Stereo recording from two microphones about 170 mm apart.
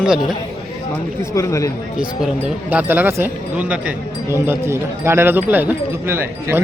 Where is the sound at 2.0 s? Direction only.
5° right (ahead or behind).